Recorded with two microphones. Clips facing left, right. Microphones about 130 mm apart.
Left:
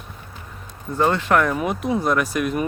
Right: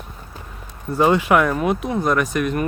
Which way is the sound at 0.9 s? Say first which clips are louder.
Right 3 dB; 10° right (ahead or behind).